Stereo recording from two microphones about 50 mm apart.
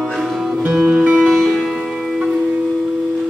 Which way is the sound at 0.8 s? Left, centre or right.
Right.